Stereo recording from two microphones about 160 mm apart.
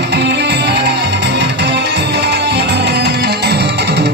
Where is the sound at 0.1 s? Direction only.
90° right.